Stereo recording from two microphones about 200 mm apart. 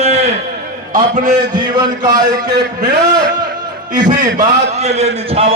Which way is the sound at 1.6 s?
20° right (ahead or behind).